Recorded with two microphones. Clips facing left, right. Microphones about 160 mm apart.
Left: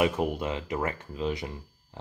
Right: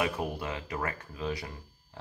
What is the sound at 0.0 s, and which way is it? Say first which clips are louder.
Speech: left 6 dB; 20° left (ahead or behind).